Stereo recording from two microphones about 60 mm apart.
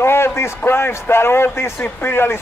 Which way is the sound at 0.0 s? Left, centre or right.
Left.